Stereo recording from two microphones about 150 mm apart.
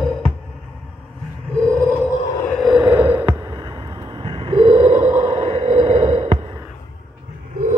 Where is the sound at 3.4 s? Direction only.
35° right (ahead or behind).